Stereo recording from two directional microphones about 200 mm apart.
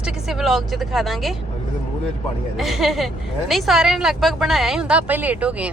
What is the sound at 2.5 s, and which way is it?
Speech, centre (ahead or behind).